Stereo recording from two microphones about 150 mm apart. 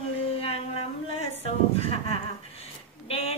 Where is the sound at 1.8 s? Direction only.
40° left (ahead or behind).